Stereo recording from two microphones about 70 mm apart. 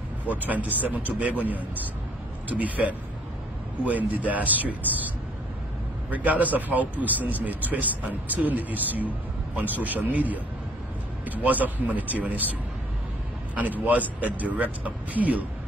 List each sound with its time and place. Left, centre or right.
0.3 s speech: right
13.6 s speech: right